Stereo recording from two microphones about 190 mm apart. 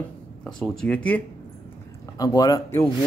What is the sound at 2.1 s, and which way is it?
Speech, 20° left (ahead or behind).